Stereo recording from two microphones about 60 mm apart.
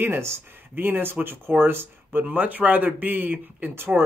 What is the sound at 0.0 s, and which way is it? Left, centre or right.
Speech, right.